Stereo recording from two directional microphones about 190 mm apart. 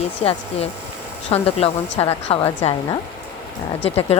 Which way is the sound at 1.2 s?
30° left (ahead or behind).